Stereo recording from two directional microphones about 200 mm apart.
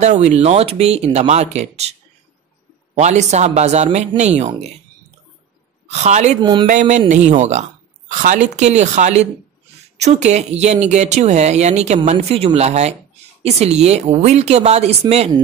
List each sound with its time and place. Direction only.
0.0 s speech: 35° right (ahead or behind)
5.9 s speech: 35° right (ahead or behind)
6.4 s speech: 25° right (ahead or behind)
6.7 s speech: 40° right (ahead or behind)